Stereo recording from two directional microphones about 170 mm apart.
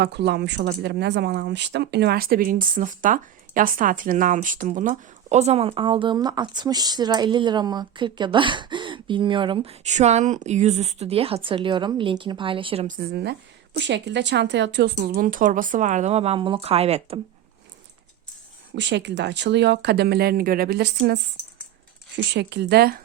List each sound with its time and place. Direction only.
0.0 s speech: 85° right; by 9.7 s 30° right (ahead or behind)
9.8 s speech: 40° right (ahead or behind)
12.9 s speech: 65° right (ahead or behind)
13.7 s speech: 90° right
14.9 s speech: 60° right (ahead or behind); by 17.2 s 35° right (ahead or behind)
18.7 s speech: 90° right; by 21.2 s 75° right (ahead or behind)
22.1 s speech: 90° right; by 23.0 s 70° right (ahead or behind)